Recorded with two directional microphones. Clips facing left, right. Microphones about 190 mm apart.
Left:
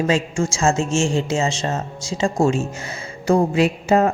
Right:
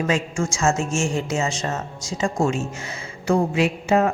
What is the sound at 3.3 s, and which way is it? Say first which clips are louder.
Speech: left 3 dB; 35° left (ahead or behind).